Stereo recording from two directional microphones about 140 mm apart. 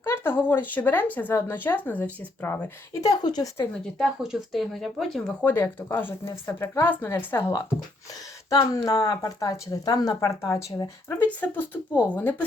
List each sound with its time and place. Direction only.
0.0 s a woman's voice: 15° left (ahead or behind)
3.9 s a woman's voice: 5° right (ahead or behind)